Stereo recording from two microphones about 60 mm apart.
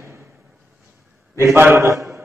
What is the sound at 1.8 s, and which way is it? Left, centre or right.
Speech, right.